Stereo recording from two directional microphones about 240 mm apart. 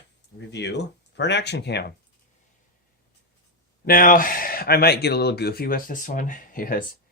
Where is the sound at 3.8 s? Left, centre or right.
Left.